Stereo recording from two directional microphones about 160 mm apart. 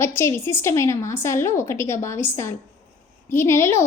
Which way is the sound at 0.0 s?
15° left (ahead or behind).